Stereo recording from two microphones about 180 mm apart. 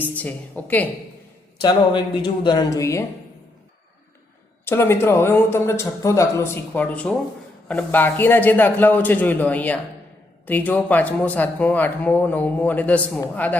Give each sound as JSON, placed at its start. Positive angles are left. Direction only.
{"t": 0.0, "sound": "speech", "side_deg": 10}
{"t": 1.6, "sound": "speech", "side_deg": 25}
{"t": 4.6, "sound": "speech", "side_deg": 15}